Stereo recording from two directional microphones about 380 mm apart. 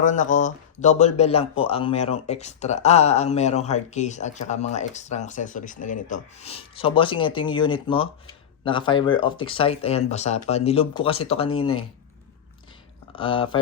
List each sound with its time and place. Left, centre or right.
0.0 s speech: centre
13.1 s speech: centre